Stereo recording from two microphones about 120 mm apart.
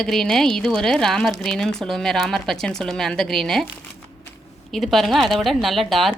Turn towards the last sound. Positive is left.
turn(degrees=0)  # may be behind; listen again after turning